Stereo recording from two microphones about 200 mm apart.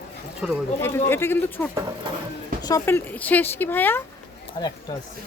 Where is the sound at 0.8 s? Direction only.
10° left (ahead or behind).